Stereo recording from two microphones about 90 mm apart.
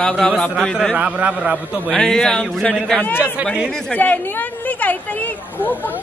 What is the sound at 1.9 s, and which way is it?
A man's voice, 5° left (ahead or behind).